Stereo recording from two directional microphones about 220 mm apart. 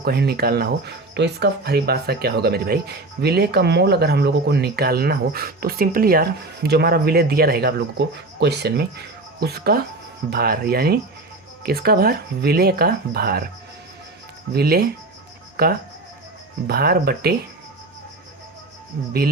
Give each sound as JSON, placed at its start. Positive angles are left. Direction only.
{"t": 0.0, "sound": "speech", "side_deg": -45}
{"t": 14.5, "sound": "speech", "side_deg": -45}
{"t": 18.9, "sound": "speech", "side_deg": -45}